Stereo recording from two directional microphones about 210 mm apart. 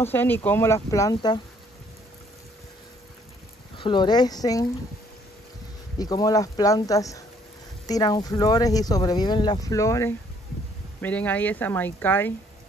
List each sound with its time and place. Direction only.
0.0 s speech: 10° left (ahead or behind)
3.7 s speech: 25° left (ahead or behind)
5.9 s speech: 20° left (ahead or behind)